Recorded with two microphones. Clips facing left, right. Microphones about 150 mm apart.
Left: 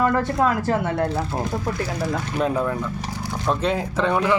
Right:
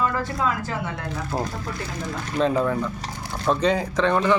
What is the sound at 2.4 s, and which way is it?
Speech, 10° left (ahead or behind).